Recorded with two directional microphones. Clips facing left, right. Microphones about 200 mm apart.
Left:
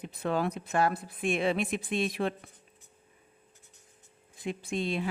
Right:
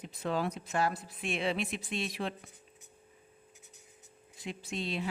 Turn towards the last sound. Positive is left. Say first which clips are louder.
# left 5 dB
turn(degrees=50)  # may be behind; listen again after turning